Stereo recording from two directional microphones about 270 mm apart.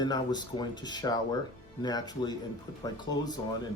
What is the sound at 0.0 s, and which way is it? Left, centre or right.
Speech, centre.